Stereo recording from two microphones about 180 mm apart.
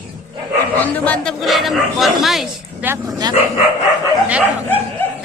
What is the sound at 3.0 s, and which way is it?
Speech, 20° right (ahead or behind).